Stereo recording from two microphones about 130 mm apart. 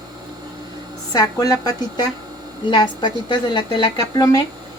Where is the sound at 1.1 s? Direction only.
30° left (ahead or behind).